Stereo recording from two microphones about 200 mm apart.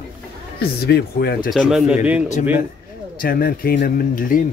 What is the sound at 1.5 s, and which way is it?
Speech, centre (ahead or behind).